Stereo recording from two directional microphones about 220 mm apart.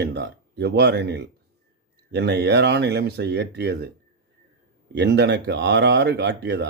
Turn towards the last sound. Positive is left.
turn(degrees=-50)  # may be behind; listen again after turning